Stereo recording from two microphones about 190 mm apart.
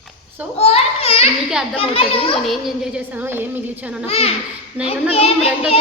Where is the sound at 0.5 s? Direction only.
35° left (ahead or behind).